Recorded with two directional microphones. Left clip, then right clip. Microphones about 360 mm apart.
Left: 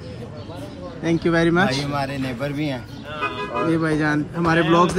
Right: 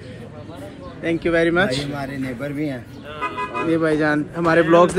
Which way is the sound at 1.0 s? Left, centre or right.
Centre.